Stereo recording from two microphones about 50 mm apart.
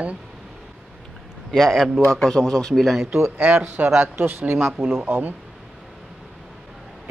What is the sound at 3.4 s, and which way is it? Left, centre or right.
Speech, right.